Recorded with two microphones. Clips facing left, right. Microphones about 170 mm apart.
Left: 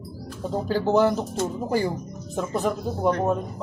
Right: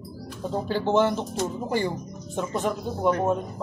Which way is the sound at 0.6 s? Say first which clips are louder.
Left 2 dB; 40° left (ahead or behind).